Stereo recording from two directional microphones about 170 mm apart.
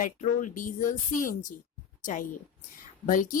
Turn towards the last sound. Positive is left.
turn(degrees=50)  # may be behind; listen again after turning